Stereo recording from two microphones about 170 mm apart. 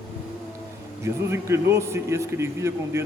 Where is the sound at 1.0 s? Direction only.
15° right (ahead or behind).